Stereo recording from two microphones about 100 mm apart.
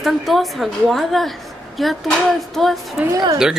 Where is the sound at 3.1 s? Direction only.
40° right (ahead or behind).